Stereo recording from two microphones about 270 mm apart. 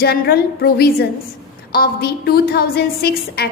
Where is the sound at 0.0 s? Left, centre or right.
Left.